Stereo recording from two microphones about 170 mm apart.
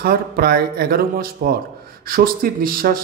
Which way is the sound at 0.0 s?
65° right (ahead or behind).